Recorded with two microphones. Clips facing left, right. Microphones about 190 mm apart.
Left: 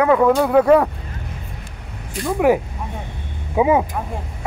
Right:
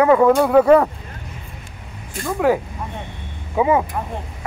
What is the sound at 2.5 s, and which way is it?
Speech, 15° left (ahead or behind).